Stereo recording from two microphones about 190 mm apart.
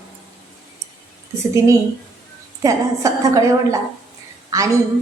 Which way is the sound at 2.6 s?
15° right (ahead or behind).